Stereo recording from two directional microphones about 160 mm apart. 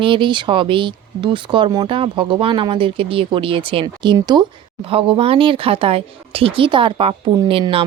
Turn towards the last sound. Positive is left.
turn(degrees=-35)  # may be behind; listen again after turning